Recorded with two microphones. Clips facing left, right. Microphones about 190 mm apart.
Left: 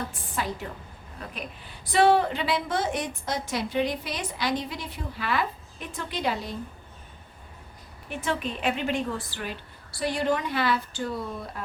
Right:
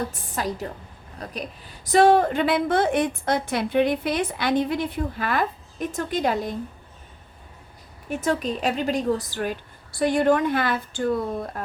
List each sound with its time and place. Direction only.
0.3 s a woman's voice: 40° right (ahead or behind)
8.1 s a woman's voice: 40° right (ahead or behind)